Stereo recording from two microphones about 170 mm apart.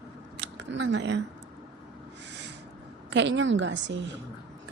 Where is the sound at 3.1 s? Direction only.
90° right.